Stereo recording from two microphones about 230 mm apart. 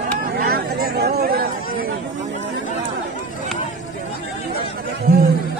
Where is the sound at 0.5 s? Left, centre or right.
Right.